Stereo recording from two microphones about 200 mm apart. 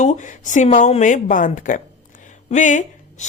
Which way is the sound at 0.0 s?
35° left (ahead or behind).